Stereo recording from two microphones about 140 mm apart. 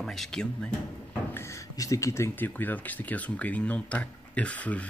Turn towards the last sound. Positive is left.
turn(degrees=10)  # may be behind; listen again after turning